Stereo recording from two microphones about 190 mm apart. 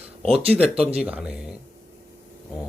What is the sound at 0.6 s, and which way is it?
Speech, 5° right (ahead or behind).